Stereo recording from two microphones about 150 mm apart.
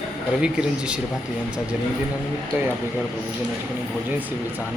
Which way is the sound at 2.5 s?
15° right (ahead or behind).